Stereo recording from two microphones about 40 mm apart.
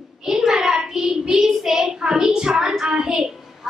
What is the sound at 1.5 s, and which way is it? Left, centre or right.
A child's voice, centre.